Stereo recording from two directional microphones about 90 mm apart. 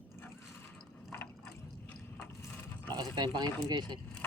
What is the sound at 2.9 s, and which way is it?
Speech, 55° right (ahead or behind).